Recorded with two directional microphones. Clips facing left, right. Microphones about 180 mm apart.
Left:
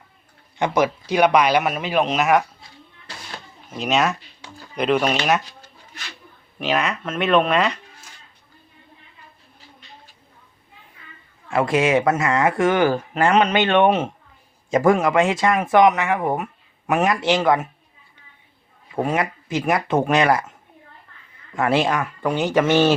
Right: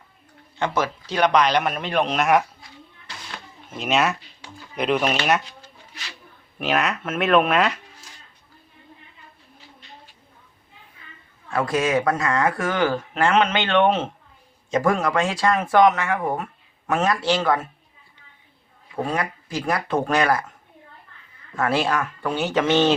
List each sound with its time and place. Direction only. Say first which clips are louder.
0.6 s speech: left 4 dB; 15° left (ahead or behind)
3.7 s speech: left 1 dB; centre (ahead or behind)
6.6 s speech: left 1 dB; centre (ahead or behind)
11.5 s speech: left 3 dB; 25° left (ahead or behind)
14.8 s speech: left 4 dB; 20° left (ahead or behind)
19.0 s speech: left 3 dB; 20° left (ahead or behind)
21.5 s speech: left 2 dB; 20° left (ahead or behind)